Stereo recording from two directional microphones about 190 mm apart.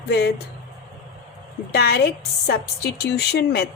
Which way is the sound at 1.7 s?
60° left (ahead or behind).